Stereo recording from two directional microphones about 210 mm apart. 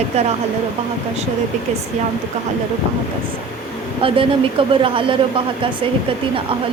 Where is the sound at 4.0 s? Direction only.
25° right (ahead or behind).